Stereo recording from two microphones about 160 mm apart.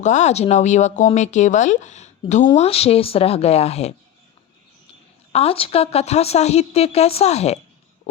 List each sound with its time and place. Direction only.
0.0 s speech: 50° left (ahead or behind)
5.3 s speech: 40° left (ahead or behind)